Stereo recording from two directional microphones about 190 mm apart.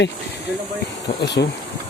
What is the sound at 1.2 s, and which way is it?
Speech, 65° left (ahead or behind).